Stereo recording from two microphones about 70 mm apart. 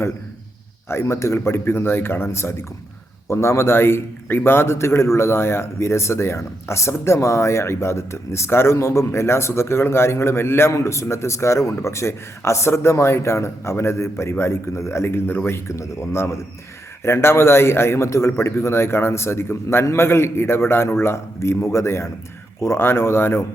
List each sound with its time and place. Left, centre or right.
0.9 s a man's voice: left